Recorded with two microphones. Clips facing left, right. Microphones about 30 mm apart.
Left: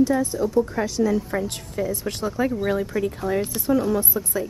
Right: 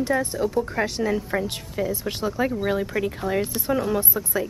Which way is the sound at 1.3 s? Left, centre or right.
Centre.